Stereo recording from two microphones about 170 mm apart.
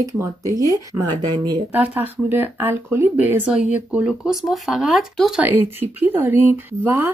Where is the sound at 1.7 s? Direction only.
10° right (ahead or behind).